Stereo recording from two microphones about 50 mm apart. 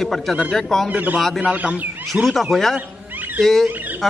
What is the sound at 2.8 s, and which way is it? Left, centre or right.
Cat, right.